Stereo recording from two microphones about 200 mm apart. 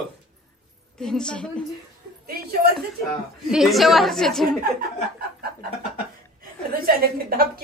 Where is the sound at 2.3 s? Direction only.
50° right (ahead or behind).